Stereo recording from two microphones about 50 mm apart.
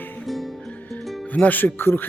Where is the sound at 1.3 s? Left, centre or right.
Left.